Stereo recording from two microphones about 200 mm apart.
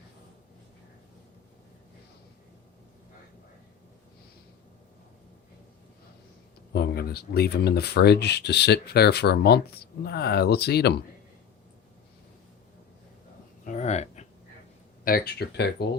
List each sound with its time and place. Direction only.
6.7 s speech: 55° left (ahead or behind)
13.7 s a sound: 35° left (ahead or behind)
15.0 s speech: 50° left (ahead or behind)